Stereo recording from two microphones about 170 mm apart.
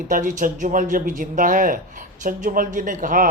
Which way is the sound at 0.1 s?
50° right (ahead or behind).